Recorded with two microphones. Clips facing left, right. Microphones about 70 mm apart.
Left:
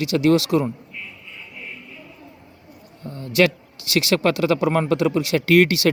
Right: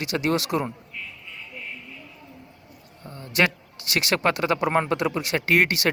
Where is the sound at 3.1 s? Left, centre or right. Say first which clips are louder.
Left 5 dB; right.